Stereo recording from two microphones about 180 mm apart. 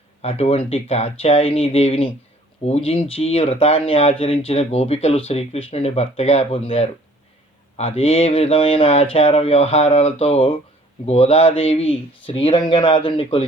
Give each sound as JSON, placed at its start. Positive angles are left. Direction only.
{"t": 0.2, "sound": "speech", "side_deg": 35}